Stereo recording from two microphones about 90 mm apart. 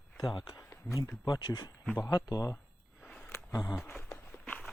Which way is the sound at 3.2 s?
30° left (ahead or behind).